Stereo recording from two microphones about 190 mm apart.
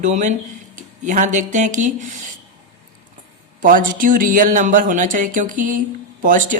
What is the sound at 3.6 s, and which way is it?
A woman's voice, 45° right (ahead or behind).